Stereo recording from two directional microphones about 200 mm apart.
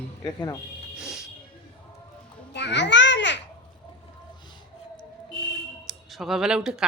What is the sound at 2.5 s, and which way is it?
Babbling, 60° left (ahead or behind).